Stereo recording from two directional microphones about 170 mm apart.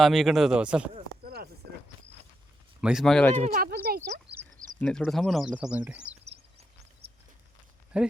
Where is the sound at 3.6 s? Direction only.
65° right (ahead or behind).